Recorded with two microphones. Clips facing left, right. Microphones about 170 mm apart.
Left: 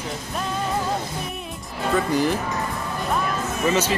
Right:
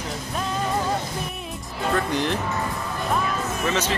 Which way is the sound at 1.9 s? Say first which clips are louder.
Left 3 dB; 10° left (ahead or behind).